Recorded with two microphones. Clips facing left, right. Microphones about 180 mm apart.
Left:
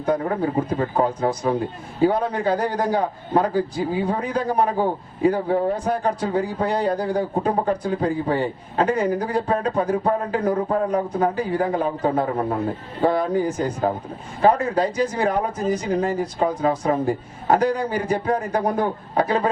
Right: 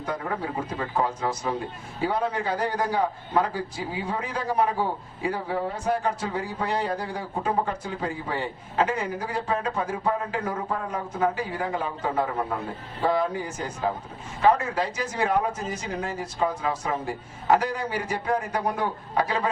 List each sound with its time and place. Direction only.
0.0 s a man's voice: 35° left (ahead or behind)
5.5 s speech: 55° left (ahead or behind)
5.9 s a man's voice: 35° left (ahead or behind)